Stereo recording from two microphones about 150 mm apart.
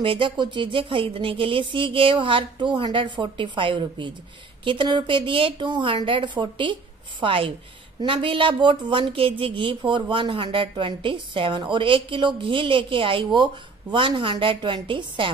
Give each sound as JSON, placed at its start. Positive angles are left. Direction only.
{"t": 0.0, "sound": "speech", "side_deg": -35}